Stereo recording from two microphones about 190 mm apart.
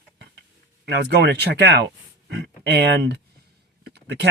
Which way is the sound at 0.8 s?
60° right (ahead or behind).